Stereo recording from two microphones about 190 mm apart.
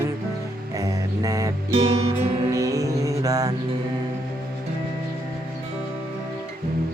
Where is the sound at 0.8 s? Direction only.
15° right (ahead or behind).